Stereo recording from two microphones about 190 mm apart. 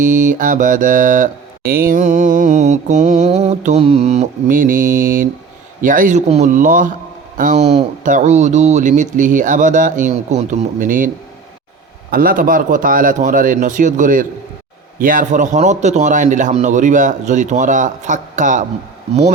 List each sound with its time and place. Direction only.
0.0 s mantra: 40° right (ahead or behind)
5.8 s a man's voice: 45° right (ahead or behind)
7.3 s mantra: 40° right (ahead or behind)
12.1 s a man's voice: 50° right (ahead or behind)
15.0 s mantra: 45° right (ahead or behind)